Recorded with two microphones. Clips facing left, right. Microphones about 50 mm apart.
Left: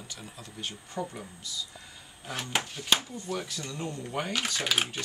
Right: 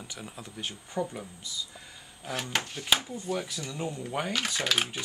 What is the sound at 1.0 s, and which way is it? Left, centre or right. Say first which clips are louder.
Speech: right 3 dB; centre.